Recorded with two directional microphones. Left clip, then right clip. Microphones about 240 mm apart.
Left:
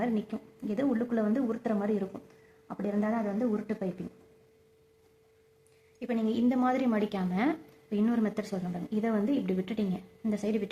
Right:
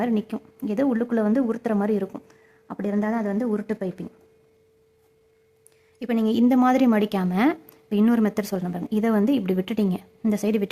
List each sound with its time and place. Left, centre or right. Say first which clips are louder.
0.0 s speech: right 7 dB; right
6.0 s speech: right 8 dB; right